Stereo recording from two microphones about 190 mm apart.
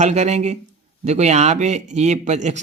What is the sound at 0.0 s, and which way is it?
Speech, 35° right (ahead or behind).